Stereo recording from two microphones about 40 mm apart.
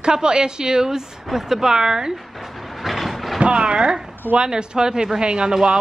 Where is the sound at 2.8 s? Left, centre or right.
Centre.